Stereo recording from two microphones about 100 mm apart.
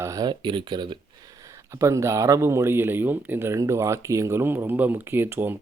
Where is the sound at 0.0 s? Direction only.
30° right (ahead or behind).